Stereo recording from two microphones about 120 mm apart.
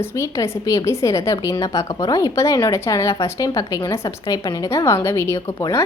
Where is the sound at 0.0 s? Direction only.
25° left (ahead or behind).